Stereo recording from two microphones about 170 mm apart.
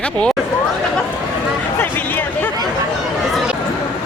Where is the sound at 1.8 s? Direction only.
10° left (ahead or behind).